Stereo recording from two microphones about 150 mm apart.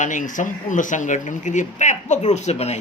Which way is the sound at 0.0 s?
60° left (ahead or behind).